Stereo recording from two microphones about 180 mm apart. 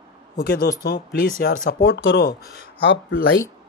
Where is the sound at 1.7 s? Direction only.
85° left.